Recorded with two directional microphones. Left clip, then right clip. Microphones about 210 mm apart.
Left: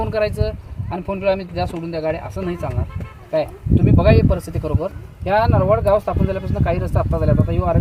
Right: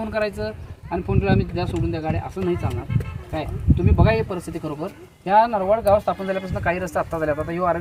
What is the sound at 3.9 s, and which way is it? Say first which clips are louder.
Speech: left 5 dB; 50° left (ahead or behind).